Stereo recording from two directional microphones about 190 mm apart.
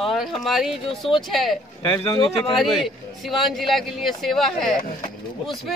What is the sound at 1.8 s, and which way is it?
Speech, 25° left (ahead or behind).